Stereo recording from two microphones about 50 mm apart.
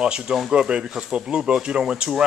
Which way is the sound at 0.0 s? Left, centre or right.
Centre.